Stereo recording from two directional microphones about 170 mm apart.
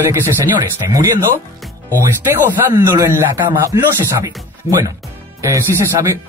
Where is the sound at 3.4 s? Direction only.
25° right (ahead or behind).